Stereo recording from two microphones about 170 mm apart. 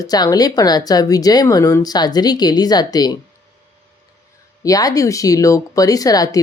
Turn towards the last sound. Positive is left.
turn(degrees=20)  # may be behind; listen again after turning